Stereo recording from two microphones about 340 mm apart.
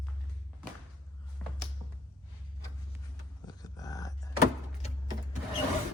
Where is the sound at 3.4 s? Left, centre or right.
Centre.